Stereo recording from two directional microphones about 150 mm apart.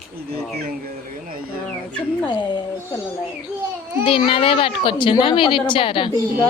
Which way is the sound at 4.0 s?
35° left (ahead or behind).